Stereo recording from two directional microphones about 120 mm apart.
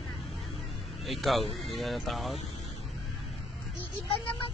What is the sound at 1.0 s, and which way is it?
Speech, centre (ahead or behind).